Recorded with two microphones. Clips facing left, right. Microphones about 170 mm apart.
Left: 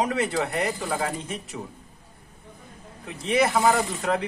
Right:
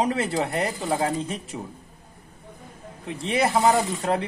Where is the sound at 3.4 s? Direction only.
30° right (ahead or behind).